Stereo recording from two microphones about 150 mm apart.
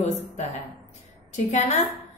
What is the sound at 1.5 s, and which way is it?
Speech, 50° left (ahead or behind).